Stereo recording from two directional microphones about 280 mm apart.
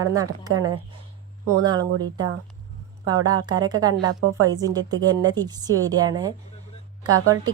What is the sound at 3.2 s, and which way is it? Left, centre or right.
Speech, centre.